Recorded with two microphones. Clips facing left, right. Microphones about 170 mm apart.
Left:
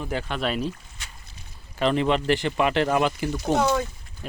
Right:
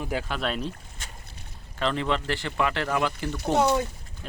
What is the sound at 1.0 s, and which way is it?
Boat, 45° right (ahead or behind).